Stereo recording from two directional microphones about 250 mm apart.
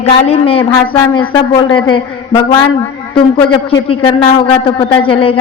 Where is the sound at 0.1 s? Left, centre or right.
Left.